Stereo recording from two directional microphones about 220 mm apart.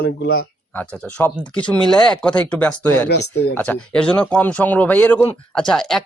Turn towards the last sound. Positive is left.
turn(degrees=0)  # may be behind; listen again after turning